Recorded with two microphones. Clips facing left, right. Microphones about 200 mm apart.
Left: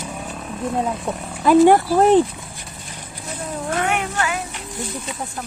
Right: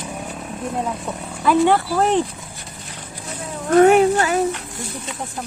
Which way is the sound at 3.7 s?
40° right (ahead or behind).